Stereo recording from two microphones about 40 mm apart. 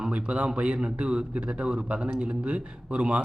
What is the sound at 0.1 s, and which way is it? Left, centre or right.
A man's voice, right.